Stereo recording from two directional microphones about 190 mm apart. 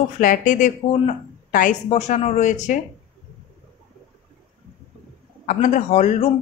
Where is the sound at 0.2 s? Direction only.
45° left (ahead or behind).